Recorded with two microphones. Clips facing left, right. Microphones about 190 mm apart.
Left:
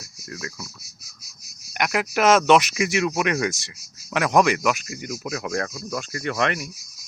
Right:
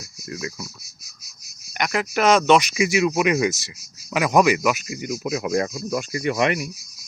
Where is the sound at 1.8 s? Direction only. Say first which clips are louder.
Even; 5° left (ahead or behind).